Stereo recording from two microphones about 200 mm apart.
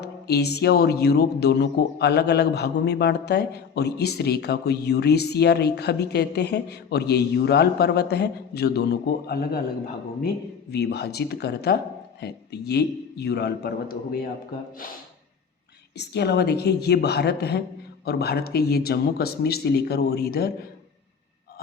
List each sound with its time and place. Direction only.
0.0 s speech: 55° left (ahead or behind)
10.7 s speech: 55° left (ahead or behind)
16.0 s speech: 55° left (ahead or behind)